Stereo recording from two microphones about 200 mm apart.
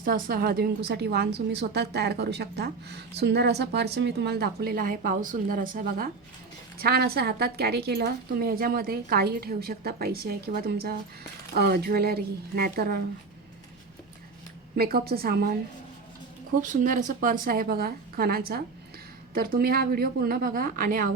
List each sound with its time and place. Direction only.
0.0 s a woman's voice: 45° right (ahead or behind)
14.8 s a woman's voice: 50° right (ahead or behind)
16.6 s a woman's voice: 40° right (ahead or behind)